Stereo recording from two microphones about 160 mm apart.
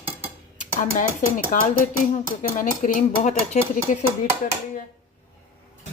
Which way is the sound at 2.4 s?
55° left (ahead or behind).